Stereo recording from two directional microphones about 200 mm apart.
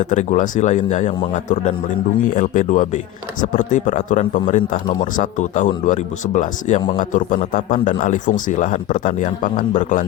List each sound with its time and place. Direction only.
0.0 s speech: 40° left (ahead or behind)